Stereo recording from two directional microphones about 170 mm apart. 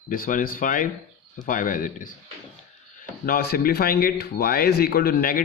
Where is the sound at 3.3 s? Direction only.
60° left (ahead or behind).